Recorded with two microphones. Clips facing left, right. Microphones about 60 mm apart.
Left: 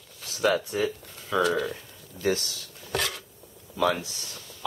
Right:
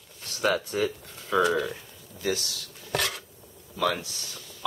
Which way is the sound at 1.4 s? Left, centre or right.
Centre.